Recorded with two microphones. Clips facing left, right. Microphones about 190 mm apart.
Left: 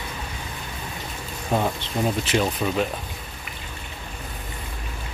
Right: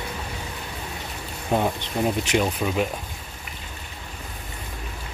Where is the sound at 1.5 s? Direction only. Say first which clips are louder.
Right 1 dB; 15° right (ahead or behind).